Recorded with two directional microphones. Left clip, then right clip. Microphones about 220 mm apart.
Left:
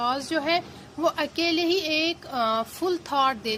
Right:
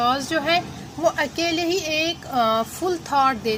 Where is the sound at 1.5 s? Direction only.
Centre (ahead or behind).